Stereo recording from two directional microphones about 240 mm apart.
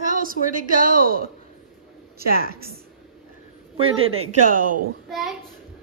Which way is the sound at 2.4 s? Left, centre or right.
Right.